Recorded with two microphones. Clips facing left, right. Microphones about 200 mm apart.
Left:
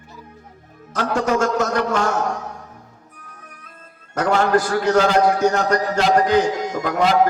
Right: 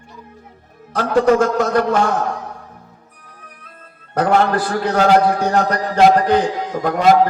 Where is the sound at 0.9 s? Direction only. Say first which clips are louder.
Right 6 dB; 55° right (ahead or behind).